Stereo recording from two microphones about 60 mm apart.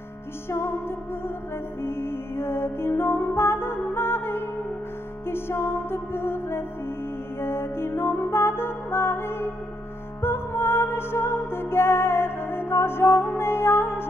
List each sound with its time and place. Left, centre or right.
0.5 s music: left